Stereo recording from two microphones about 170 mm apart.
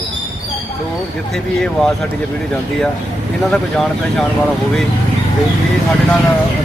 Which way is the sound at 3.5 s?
5° left (ahead or behind).